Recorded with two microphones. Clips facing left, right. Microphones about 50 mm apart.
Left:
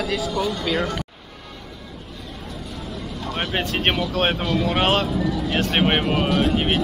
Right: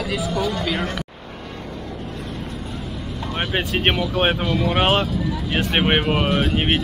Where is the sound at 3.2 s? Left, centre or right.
Centre.